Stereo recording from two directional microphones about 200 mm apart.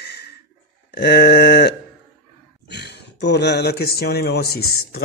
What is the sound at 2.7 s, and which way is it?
Speech, 55° left (ahead or behind).